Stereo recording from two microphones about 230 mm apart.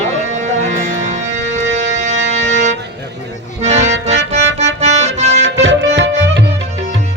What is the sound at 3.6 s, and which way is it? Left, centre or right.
Accordion, right.